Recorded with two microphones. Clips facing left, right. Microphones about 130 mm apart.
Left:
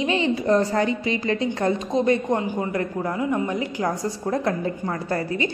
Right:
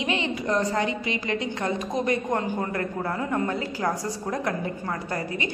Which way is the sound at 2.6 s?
15° left (ahead or behind).